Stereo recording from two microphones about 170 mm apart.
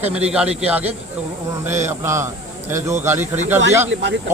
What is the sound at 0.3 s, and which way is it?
A man's voice, 5° right (ahead or behind).